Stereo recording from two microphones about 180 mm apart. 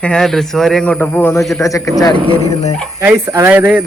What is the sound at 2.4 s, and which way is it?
Speech, 35° left (ahead or behind).